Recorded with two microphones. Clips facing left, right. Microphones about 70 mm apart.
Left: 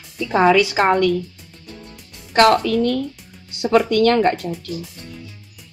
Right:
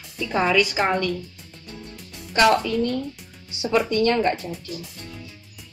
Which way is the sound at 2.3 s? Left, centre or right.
Left.